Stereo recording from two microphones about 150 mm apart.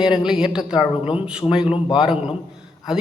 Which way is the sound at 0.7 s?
30° left (ahead or behind).